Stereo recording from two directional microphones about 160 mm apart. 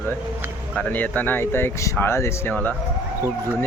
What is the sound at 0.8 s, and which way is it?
Speech, 10° left (ahead or behind).